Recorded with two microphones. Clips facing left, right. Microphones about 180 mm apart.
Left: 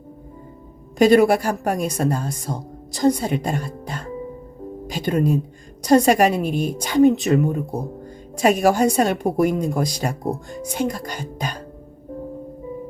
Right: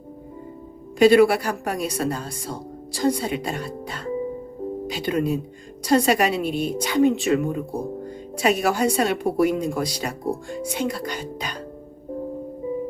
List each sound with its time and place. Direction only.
0.9 s a woman's voice: 45° left (ahead or behind)